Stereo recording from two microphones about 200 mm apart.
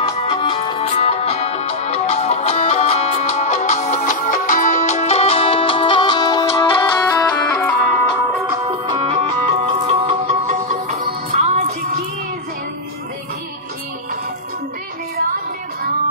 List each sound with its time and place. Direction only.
0.3 s music: 25° left (ahead or behind)
7.2 s music: 5° left (ahead or behind)
8.6 s music: 25° right (ahead or behind)